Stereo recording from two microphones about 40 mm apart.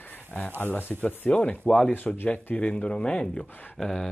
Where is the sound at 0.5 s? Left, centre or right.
Left.